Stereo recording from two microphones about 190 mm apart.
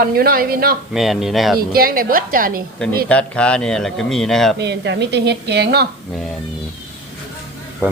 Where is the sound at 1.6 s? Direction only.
50° right (ahead or behind).